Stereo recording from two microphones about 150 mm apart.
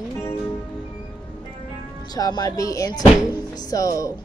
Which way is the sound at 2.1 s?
25° left (ahead or behind).